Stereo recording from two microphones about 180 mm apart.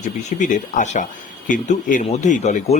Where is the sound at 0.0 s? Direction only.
40° left (ahead or behind).